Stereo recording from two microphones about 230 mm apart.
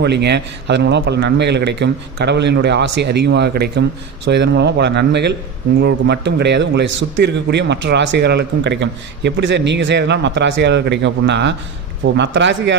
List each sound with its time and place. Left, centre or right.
0.0 s a man's voice: right